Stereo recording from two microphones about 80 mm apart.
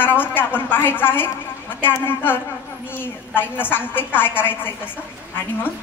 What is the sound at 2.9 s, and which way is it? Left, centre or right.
A woman's voice, left.